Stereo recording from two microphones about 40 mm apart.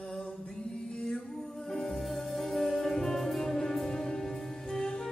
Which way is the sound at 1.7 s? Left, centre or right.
Centre.